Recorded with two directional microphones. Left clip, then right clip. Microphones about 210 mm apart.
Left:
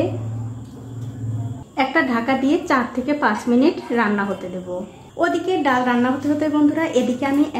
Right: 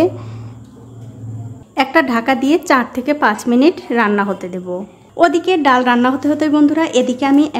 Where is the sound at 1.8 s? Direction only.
35° right (ahead or behind).